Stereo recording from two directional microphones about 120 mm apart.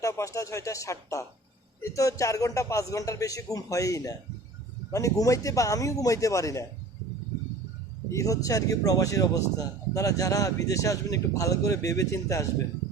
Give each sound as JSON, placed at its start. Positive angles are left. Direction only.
{"t": 0.0, "sound": "speech", "side_deg": 25}
{"t": 8.1, "sound": "speech", "side_deg": 30}